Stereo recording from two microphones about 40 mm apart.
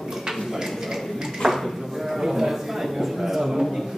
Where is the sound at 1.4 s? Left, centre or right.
Centre.